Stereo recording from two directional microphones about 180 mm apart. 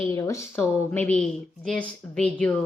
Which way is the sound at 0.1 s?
15° left (ahead or behind).